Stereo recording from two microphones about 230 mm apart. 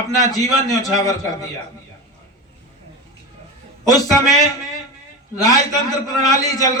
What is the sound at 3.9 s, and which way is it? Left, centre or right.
A man's voice, centre.